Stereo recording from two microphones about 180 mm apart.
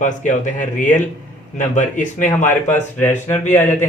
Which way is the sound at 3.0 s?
10° left (ahead or behind).